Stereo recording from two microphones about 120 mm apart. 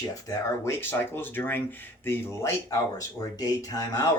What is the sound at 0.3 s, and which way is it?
Speech, 25° left (ahead or behind).